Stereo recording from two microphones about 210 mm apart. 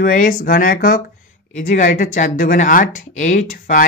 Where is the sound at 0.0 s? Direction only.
40° left (ahead or behind).